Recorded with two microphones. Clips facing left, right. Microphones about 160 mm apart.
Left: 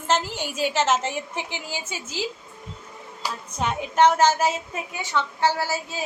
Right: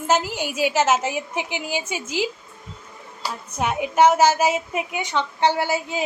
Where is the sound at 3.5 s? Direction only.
10° right (ahead or behind).